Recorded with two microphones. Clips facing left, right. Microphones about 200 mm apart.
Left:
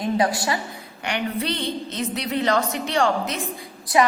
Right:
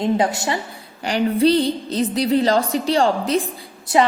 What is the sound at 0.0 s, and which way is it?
A woman's voice, 25° right (ahead or behind).